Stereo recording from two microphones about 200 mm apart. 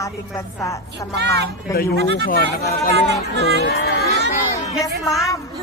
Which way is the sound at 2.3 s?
45° left (ahead or behind).